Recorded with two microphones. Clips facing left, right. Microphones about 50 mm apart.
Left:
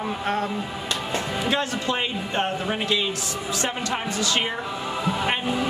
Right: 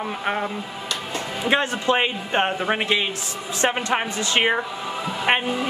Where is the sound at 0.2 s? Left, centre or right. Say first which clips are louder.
Right 1 dB; centre.